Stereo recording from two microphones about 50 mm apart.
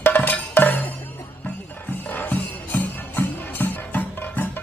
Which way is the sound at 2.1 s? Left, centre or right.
Left.